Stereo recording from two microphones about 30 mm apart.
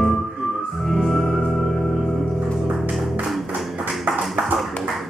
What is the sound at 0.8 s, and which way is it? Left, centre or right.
Organ, centre.